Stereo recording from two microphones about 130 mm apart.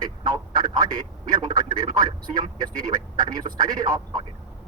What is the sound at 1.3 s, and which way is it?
A man's voice, 35° right (ahead or behind).